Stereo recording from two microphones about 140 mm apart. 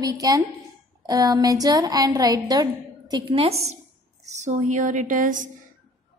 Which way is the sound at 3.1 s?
40° right (ahead or behind).